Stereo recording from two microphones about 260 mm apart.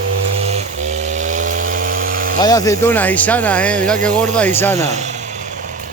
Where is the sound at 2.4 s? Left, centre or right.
Centre.